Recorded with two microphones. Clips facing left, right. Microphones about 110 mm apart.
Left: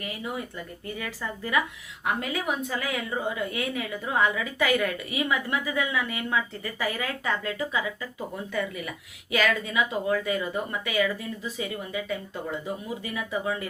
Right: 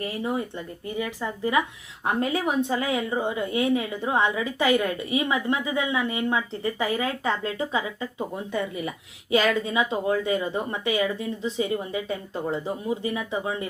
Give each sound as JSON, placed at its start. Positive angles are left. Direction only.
{"t": 0.0, "sound": "a woman's voice", "side_deg": -30}